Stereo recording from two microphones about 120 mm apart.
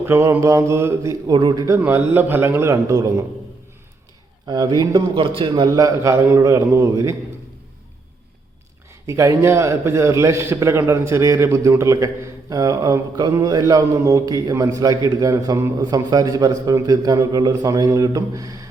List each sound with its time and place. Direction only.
0.0 s speech: 20° right (ahead or behind)
1.3 s a man's voice: 35° right (ahead or behind)
1.8 s speech: 15° right (ahead or behind)
4.4 s a man's voice: 35° right (ahead or behind)
5.6 s speech: 30° right (ahead or behind)
9.0 s a man's voice: 25° right (ahead or behind)